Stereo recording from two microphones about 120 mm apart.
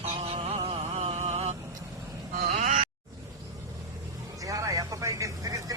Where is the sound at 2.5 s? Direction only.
85° right.